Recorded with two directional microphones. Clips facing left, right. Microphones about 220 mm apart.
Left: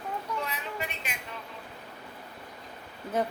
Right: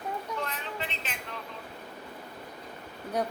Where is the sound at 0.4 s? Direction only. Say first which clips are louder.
Left 1 dB; 10° left (ahead or behind).